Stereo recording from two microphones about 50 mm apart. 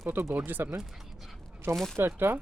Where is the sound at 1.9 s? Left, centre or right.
Right.